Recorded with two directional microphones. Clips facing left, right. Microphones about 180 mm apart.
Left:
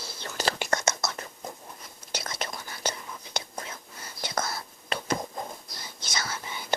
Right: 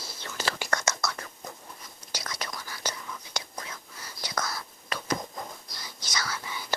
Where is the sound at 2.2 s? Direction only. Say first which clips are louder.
Even; 25° left (ahead or behind).